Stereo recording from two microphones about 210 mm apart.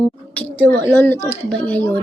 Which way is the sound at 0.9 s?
10° left (ahead or behind).